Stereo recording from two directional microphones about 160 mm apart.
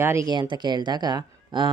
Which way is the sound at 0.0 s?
20° right (ahead or behind).